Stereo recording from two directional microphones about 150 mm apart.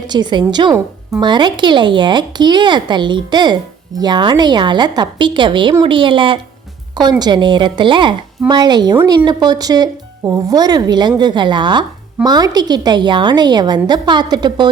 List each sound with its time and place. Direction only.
0.1 s a woman's voice: 30° right (ahead or behind)